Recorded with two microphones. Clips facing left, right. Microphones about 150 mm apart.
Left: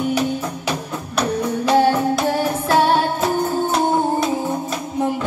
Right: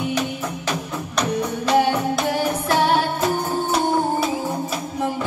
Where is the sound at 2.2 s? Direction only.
30° left (ahead or behind).